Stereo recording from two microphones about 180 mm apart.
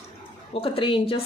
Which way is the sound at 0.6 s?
30° left (ahead or behind).